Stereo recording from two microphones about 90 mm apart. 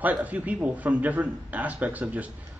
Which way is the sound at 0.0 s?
15° right (ahead or behind).